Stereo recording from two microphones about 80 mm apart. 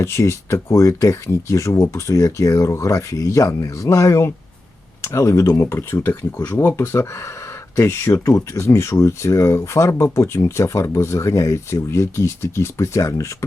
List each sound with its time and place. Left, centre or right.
0.0 s speech: left